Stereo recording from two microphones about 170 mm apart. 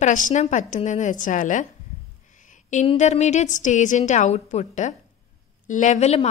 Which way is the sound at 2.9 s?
45° left (ahead or behind).